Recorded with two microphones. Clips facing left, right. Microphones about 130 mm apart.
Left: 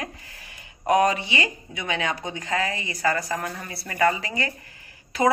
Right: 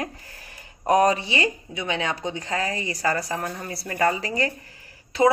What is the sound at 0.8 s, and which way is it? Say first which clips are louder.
A woman's voice: right 1 dB; 35° right (ahead or behind).